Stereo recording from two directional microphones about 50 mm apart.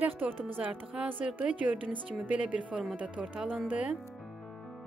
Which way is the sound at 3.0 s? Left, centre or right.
Right.